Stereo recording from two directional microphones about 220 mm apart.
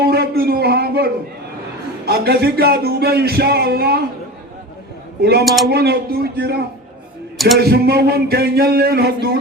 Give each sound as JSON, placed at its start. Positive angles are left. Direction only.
{"t": 0.0, "sound": "a sound", "side_deg": -45}
{"t": 2.0, "sound": "speech", "side_deg": -45}
{"t": 5.2, "sound": "speech", "side_deg": -45}
{"t": 7.3, "sound": "a man's voice", "side_deg": 0}
{"t": 7.6, "sound": "speech", "side_deg": -45}